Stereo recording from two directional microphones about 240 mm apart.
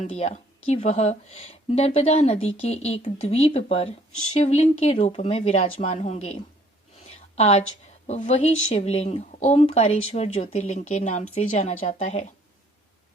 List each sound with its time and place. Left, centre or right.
0.0 s speech: left
7.3 s a woman's voice: left